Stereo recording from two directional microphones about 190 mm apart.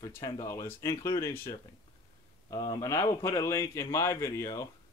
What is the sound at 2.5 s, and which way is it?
Speech, 20° left (ahead or behind).